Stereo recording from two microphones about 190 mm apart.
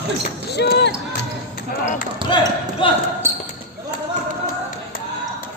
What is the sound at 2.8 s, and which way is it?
Speech, 25° left (ahead or behind).